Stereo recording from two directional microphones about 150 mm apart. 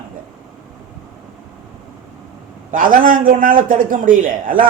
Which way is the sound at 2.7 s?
65° right (ahead or behind).